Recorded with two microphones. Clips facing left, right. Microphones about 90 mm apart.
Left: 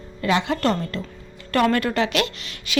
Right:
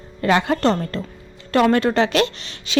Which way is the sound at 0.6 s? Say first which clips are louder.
Right 3 dB; 30° right (ahead or behind).